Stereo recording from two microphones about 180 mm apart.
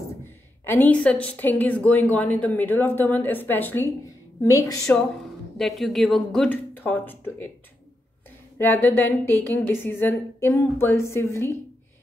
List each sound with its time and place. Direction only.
0.7 s a woman's voice: 10° left (ahead or behind)
5.6 s speech: centre (ahead or behind)
8.5 s speech: 10° left (ahead or behind)